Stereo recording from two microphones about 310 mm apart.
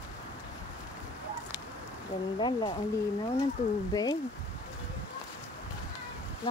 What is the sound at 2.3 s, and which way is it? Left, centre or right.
Speech, centre.